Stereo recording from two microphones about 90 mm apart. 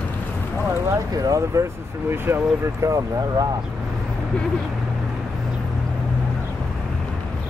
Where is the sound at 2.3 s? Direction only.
30° right (ahead or behind).